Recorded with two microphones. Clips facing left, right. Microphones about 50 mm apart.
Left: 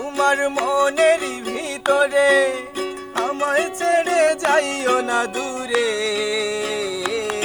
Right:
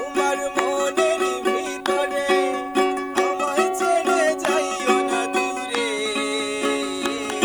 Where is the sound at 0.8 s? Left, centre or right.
Left.